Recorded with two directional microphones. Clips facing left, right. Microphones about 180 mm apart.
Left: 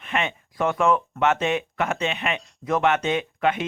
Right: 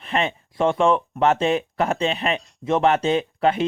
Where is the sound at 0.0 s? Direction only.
35° right (ahead or behind).